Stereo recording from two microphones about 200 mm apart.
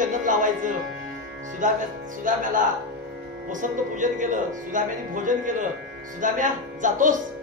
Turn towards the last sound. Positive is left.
turn(degrees=-40)  # may be behind; listen again after turning